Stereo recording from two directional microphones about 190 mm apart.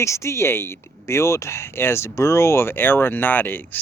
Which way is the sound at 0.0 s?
15° left (ahead or behind).